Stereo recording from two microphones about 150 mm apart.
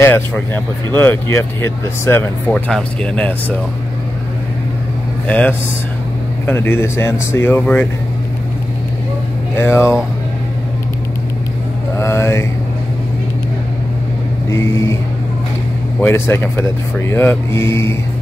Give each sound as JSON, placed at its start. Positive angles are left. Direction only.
{"t": 0.0, "sound": "speech", "side_deg": 15}
{"t": 5.3, "sound": "speech", "side_deg": 10}
{"t": 9.6, "sound": "speech", "side_deg": 15}
{"t": 12.0, "sound": "speech", "side_deg": 15}
{"t": 14.5, "sound": "speech", "side_deg": 20}
{"t": 16.0, "sound": "speech", "side_deg": 15}